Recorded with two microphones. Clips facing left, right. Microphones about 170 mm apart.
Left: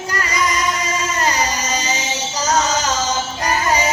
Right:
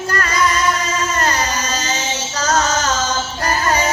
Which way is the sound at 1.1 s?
15° left (ahead or behind).